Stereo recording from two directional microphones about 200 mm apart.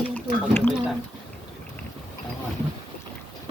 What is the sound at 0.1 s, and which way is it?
Drip, 10° left (ahead or behind).